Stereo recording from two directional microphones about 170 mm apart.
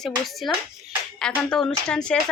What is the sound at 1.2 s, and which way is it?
Speech, 5° left (ahead or behind).